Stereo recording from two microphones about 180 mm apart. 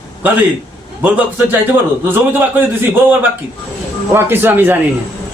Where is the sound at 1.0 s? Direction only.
10° right (ahead or behind).